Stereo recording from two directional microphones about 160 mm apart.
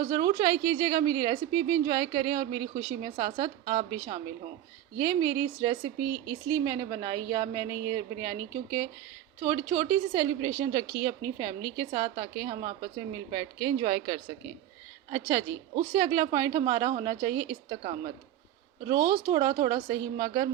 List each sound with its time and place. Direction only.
0.0 s a woman's voice: 20° right (ahead or behind)
15.1 s a woman's voice: 20° right (ahead or behind)
18.9 s a woman's voice: 20° right (ahead or behind)